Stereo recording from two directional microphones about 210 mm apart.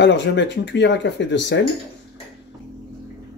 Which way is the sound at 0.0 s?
55° left (ahead or behind).